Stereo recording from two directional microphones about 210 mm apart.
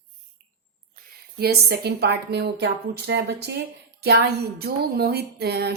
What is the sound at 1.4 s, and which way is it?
Speech, 50° right (ahead or behind).